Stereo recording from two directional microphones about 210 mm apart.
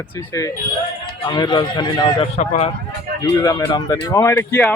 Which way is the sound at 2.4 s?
30° left (ahead or behind).